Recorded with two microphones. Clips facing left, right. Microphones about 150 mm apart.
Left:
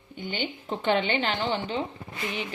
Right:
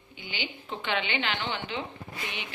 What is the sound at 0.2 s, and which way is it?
Speech, 50° left (ahead or behind).